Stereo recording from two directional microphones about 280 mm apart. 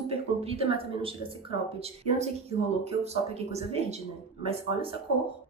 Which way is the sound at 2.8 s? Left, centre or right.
Right.